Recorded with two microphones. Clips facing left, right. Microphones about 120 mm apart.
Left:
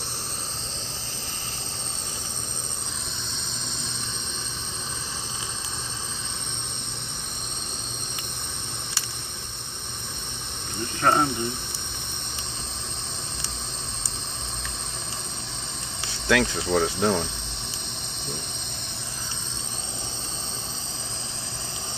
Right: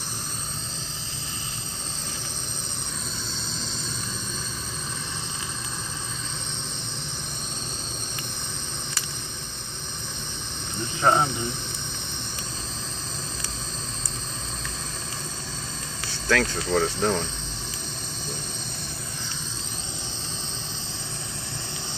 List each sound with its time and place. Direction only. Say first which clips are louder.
11.0 s speech: right 1 dB; 15° right (ahead or behind)
16.3 s speech: left 1 dB; 15° left (ahead or behind)